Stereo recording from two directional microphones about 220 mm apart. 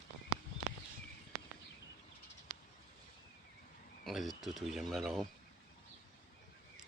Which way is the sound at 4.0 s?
Centre (ahead or behind).